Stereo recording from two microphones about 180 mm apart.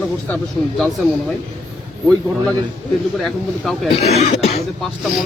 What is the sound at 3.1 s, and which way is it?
Speech, centre (ahead or behind).